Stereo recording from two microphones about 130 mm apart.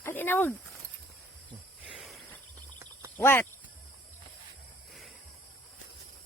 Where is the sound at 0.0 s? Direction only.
15° left (ahead or behind).